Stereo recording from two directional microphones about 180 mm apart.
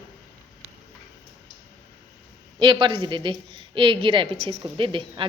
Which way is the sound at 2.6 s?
25° right (ahead or behind).